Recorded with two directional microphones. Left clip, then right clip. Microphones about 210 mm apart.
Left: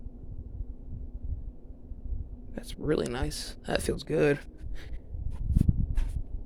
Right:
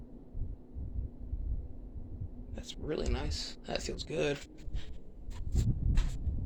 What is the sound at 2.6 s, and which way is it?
Speech, 60° left (ahead or behind).